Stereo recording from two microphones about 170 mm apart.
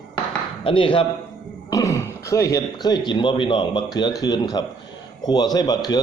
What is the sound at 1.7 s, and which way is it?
Speech, 20° left (ahead or behind).